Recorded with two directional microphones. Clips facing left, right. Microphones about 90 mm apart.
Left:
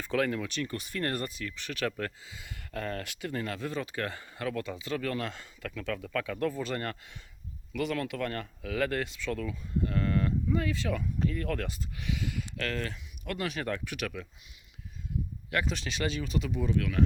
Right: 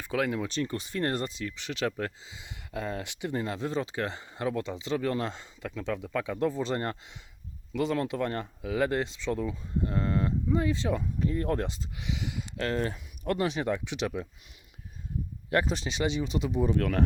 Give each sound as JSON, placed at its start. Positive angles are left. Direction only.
{"t": 0.0, "sound": "speech", "side_deg": -15}
{"t": 0.4, "sound": "speech", "side_deg": -30}
{"t": 13.7, "sound": "speech", "side_deg": -15}
{"t": 15.4, "sound": "speech", "side_deg": -30}